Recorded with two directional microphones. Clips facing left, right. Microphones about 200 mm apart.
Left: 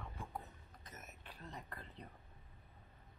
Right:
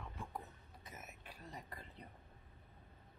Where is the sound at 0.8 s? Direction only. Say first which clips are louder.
Right 1 dB; 10° right (ahead or behind).